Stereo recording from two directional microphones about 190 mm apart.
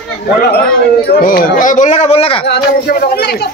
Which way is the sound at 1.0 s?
45° left (ahead or behind).